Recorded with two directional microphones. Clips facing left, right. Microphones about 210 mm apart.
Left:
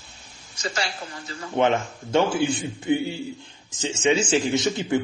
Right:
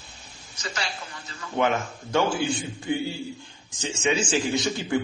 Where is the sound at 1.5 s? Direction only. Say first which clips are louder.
Left 3 dB; 25° left (ahead or behind).